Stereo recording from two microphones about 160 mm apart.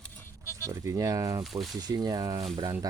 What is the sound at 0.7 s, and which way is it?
Speech, 25° right (ahead or behind).